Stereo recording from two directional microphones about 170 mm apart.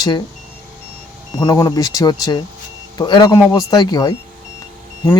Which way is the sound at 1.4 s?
25° left (ahead or behind).